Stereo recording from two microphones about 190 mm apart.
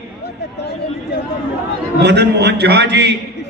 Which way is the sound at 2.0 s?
60° right (ahead or behind).